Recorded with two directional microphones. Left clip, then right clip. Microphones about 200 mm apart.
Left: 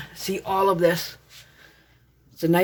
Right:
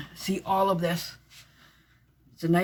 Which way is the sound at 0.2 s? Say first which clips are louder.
Left 3 dB; 45° left (ahead or behind).